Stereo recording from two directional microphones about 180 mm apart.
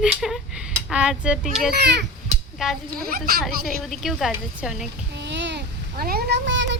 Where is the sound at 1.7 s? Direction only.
70° right (ahead or behind).